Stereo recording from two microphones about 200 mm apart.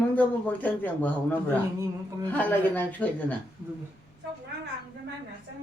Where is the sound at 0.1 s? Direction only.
5° left (ahead or behind).